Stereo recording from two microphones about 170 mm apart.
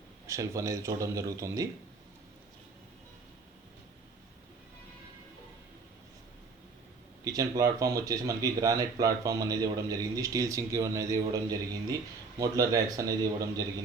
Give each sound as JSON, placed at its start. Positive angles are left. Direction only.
{"t": 0.3, "sound": "speech", "side_deg": -20}
{"t": 7.3, "sound": "speech", "side_deg": -20}